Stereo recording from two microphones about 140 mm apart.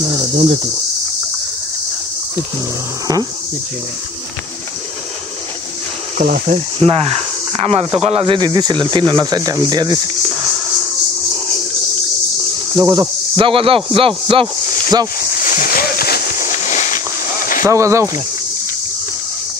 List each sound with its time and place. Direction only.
6.1 s speech: 80° right
6.9 s speech: 45° right (ahead or behind)
8.4 s speech: 30° right (ahead or behind)
12.7 s speech: 25° right (ahead or behind)
13.4 s speech: 40° right (ahead or behind)
15.4 s horse: 85° left; by 17.0 s 60° left (ahead or behind)
17.6 s speech: 20° right (ahead or behind)